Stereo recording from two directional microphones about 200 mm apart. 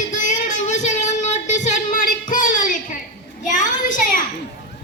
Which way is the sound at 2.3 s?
40° left (ahead or behind).